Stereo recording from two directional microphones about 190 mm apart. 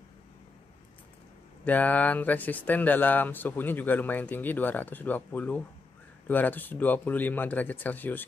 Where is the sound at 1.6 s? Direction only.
10° left (ahead or behind).